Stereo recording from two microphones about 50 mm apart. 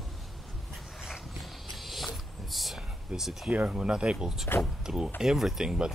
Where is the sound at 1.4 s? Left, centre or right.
Centre.